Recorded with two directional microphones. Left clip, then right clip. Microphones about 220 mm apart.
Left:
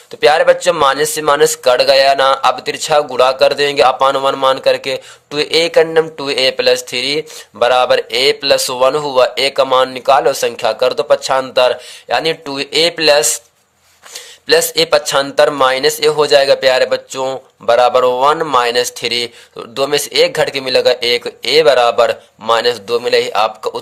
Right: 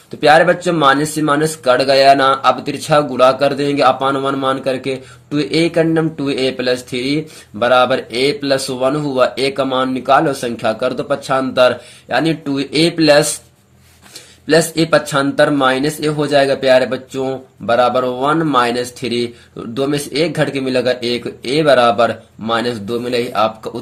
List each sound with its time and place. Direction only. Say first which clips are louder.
0.2 s a man's voice: left 1 dB; 35° left (ahead or behind)
14.4 s a man's voice: left 2 dB; 40° left (ahead or behind)